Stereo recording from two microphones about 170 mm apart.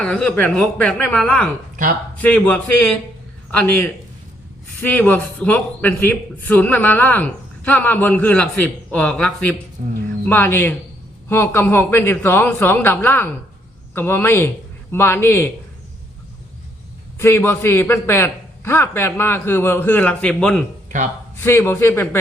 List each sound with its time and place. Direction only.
0.0 s a man's voice: 5° left (ahead or behind)
9.8 s speech: 50° right (ahead or behind)
10.2 s a man's voice: 10° left (ahead or behind)
17.2 s a man's voice: 15° left (ahead or behind)